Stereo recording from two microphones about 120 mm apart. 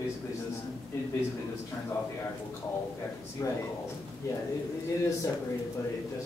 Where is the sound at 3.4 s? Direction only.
25° left (ahead or behind).